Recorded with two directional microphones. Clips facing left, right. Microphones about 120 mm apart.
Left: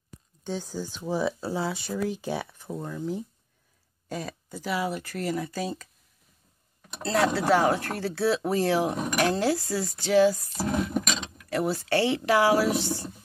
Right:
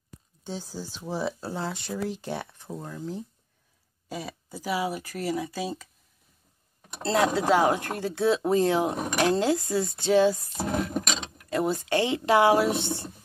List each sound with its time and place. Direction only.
0.4 s speech: 5° right (ahead or behind)
7.2 s speech: 15° right (ahead or behind)